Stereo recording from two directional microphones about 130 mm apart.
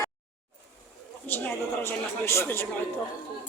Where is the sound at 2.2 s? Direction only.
20° left (ahead or behind).